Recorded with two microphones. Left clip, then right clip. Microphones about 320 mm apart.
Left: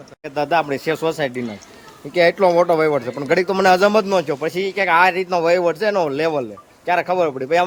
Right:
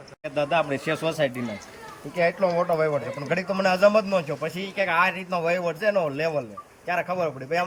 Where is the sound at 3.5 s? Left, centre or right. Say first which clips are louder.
Left 4 dB; centre.